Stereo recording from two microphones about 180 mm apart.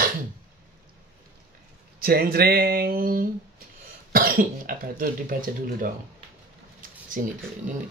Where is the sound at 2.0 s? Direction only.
55° right (ahead or behind).